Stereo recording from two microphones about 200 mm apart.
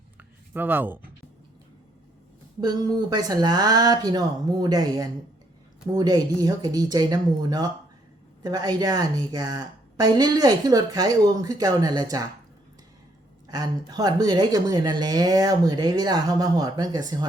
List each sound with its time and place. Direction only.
0.2 s a sound: 10° right (ahead or behind)
2.6 s a woman's voice: 20° right (ahead or behind)
13.5 s a woman's voice: 20° right (ahead or behind)